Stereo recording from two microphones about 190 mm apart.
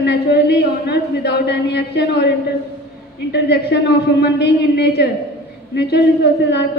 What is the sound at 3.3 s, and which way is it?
A man's voice, 60° left (ahead or behind).